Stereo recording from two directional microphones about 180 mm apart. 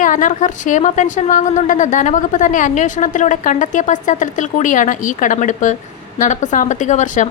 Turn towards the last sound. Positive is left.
turn(degrees=40)  # may be behind; listen again after turning